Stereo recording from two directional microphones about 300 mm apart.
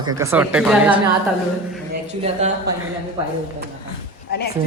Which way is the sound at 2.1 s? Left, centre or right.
Right.